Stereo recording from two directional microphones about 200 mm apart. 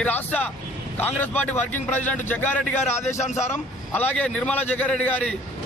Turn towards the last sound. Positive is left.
turn(degrees=5)  # may be behind; listen again after turning